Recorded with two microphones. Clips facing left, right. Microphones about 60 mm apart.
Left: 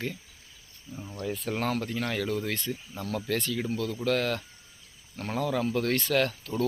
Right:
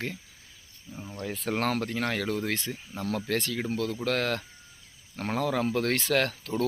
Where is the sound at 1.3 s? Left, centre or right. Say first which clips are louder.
Right 1 dB; right.